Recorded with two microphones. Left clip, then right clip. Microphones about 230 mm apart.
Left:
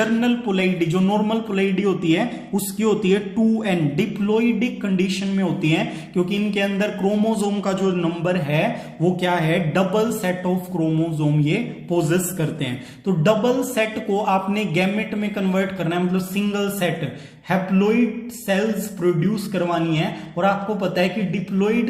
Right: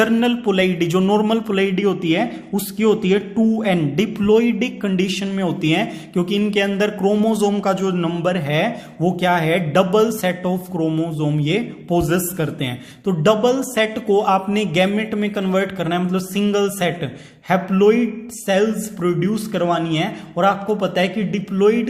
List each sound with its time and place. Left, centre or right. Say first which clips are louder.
0.0 s a man's voice: right 4 dB; right
19.0 s a man's voice: right 1 dB; right